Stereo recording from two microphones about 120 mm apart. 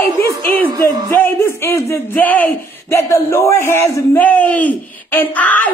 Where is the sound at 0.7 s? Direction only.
30° right (ahead or behind).